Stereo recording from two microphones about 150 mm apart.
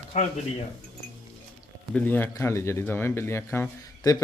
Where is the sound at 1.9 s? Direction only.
10° left (ahead or behind).